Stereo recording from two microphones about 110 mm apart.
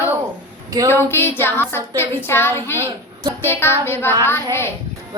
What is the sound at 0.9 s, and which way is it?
Music, 20° left (ahead or behind).